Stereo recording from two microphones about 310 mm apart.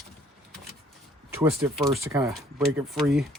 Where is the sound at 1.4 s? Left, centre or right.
Centre.